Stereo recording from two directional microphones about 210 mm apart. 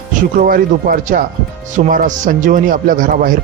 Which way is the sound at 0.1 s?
40° right (ahead or behind).